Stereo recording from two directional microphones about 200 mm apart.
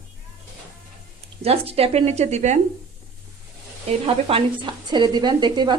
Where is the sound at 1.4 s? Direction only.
30° right (ahead or behind).